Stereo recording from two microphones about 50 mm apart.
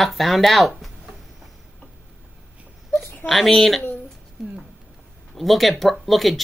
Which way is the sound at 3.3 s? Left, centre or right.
Centre.